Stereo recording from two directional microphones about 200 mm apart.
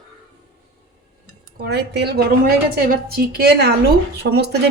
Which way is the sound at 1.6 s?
55° right (ahead or behind).